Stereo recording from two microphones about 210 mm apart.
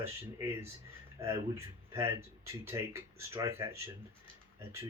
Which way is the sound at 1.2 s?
25° right (ahead or behind).